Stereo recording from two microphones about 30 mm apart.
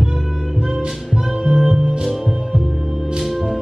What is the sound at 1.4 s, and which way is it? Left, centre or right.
Music, right.